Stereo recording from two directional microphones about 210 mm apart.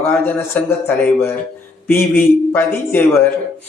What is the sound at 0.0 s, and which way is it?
Speech, 10° left (ahead or behind).